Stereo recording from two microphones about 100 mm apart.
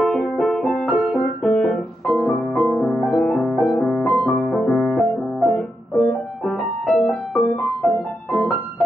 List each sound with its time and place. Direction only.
0.0 s music: centre (ahead or behind)
6.0 s music: centre (ahead or behind)